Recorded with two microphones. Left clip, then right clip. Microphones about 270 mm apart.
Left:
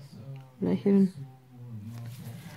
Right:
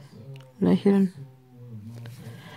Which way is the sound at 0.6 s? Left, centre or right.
Right.